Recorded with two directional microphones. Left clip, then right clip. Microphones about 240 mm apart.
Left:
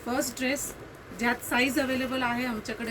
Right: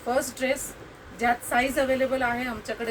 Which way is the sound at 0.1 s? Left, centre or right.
Centre.